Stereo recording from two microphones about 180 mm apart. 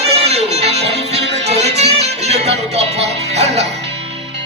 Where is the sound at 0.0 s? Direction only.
35° right (ahead or behind).